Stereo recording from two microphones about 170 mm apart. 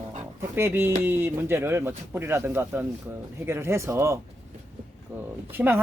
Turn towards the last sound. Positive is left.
turn(degrees=-10)  # may be behind; listen again after turning